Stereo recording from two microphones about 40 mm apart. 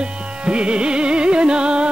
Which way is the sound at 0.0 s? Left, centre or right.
Right.